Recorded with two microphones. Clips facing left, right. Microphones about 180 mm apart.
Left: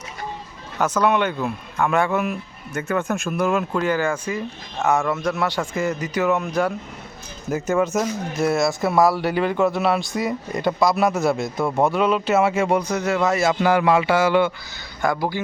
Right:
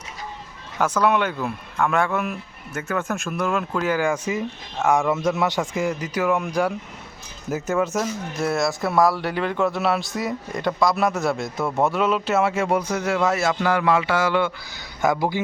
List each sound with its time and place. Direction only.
0.8 s speech: 5° right (ahead or behind)
1.4 s speech: 5° left (ahead or behind)
3.8 s a man's voice: 10° right (ahead or behind)
13.5 s speech: 15° left (ahead or behind)
15.0 s a man's voice: 20° right (ahead or behind)